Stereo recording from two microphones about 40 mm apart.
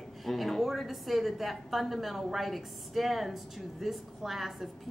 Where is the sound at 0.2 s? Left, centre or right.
Centre.